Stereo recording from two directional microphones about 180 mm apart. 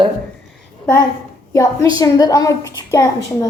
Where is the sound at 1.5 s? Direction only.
20° left (ahead or behind).